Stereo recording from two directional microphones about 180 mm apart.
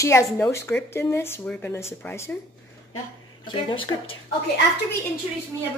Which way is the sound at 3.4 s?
25° left (ahead or behind).